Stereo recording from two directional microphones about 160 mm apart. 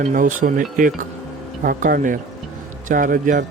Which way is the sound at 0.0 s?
55° right (ahead or behind).